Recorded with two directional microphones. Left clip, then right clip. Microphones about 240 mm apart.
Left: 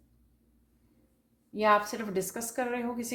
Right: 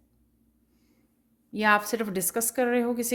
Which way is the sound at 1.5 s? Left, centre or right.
Right.